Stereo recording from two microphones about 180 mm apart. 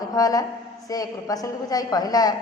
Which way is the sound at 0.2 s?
20° left (ahead or behind).